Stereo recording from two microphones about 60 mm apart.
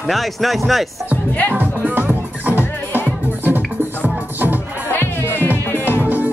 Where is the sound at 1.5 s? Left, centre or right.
Right.